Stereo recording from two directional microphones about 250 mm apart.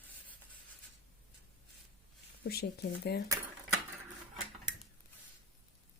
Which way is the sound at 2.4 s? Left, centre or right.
Left.